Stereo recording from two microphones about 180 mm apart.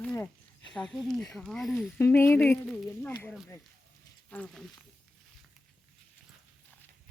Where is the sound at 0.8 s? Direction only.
Centre (ahead or behind).